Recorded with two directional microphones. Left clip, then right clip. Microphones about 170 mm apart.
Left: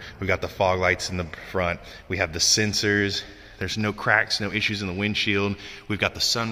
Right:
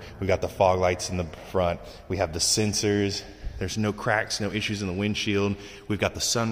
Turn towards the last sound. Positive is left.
turn(degrees=-20)  # may be behind; listen again after turning